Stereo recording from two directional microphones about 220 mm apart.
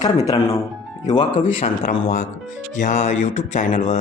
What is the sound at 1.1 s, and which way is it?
Speech, 25° left (ahead or behind).